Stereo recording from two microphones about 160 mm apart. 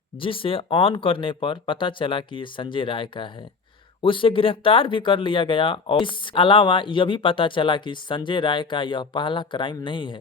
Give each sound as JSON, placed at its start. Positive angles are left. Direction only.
{"t": 0.2, "sound": "speech", "side_deg": 35}